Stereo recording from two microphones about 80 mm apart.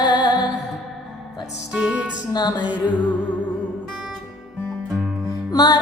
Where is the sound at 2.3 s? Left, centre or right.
Left.